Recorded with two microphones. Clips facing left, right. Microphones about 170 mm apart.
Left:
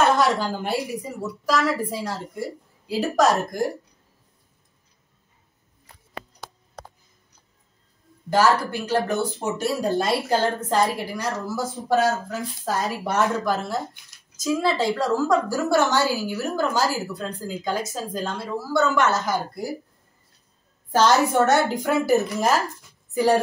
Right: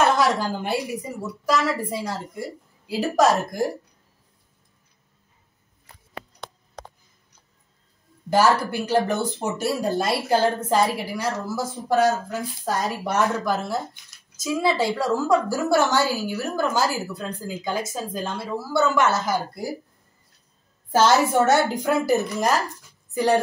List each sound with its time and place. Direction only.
0.0 s a woman's voice: centre (ahead or behind)
8.3 s speech: 15° right (ahead or behind)
9.5 s a woman's voice: centre (ahead or behind)
10.7 s speech: 15° right (ahead or behind)
11.1 s a woman's voice: centre (ahead or behind)
20.9 s a woman's voice: 5° right (ahead or behind)